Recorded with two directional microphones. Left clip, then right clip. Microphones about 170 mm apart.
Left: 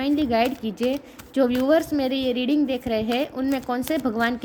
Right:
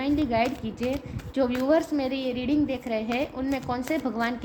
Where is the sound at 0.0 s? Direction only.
45° left (ahead or behind).